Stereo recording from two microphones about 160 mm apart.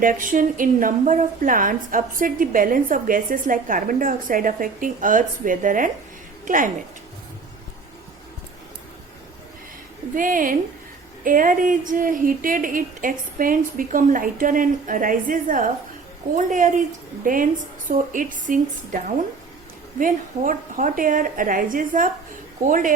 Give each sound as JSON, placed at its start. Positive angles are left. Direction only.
{"t": 0.0, "sound": "a woman's voice", "side_deg": -60}
{"t": 10.2, "sound": "a woman's voice", "side_deg": -60}